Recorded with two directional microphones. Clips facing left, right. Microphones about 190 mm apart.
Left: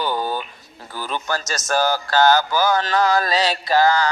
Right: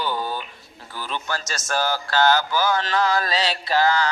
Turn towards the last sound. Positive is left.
turn(degrees=40)  # may be behind; listen again after turning